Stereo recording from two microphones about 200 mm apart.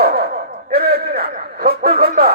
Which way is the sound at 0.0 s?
50° right (ahead or behind).